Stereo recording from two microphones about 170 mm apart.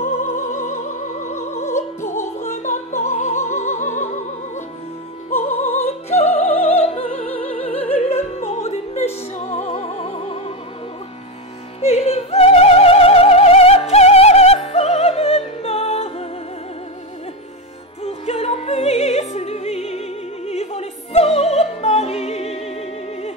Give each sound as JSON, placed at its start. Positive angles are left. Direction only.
{"t": 0.0, "sound": "music", "side_deg": 45}
{"t": 2.4, "sound": "music", "side_deg": 45}
{"t": 4.0, "sound": "opera", "side_deg": 45}
{"t": 5.4, "sound": "music", "side_deg": 40}
{"t": 5.9, "sound": "opera", "side_deg": 40}
{"t": 11.8, "sound": "opera", "side_deg": 35}
{"t": 18.0, "sound": "opera", "side_deg": 35}